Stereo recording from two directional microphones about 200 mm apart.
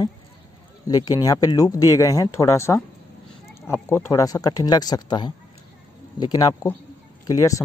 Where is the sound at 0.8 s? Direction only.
20° left (ahead or behind).